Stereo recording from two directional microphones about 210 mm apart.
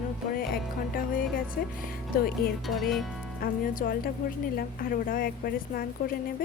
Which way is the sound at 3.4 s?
40° left (ahead or behind).